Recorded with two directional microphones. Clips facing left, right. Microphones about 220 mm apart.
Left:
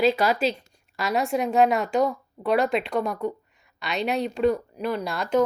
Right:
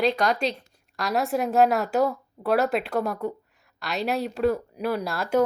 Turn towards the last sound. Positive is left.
turn(degrees=-5)  # may be behind; listen again after turning